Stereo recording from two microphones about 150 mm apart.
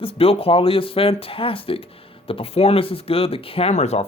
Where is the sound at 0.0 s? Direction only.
40° left (ahead or behind).